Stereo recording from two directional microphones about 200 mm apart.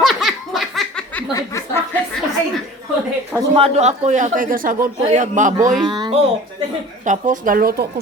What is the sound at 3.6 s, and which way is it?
A man's voice, 35° right (ahead or behind).